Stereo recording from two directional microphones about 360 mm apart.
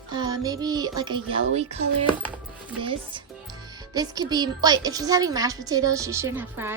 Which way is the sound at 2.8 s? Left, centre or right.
Centre.